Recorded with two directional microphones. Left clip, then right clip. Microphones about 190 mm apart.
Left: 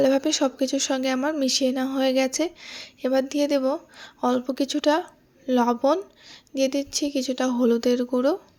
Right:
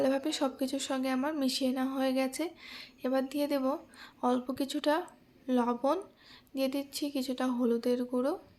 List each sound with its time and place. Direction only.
0.0 s speech: 30° left (ahead or behind)